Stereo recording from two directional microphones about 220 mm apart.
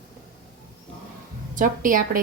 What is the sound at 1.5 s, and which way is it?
Speech, 35° right (ahead or behind).